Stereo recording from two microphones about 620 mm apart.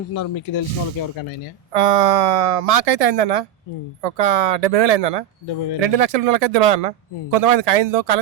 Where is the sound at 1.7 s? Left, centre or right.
Right.